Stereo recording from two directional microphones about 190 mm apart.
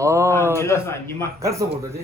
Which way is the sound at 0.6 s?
15° left (ahead or behind).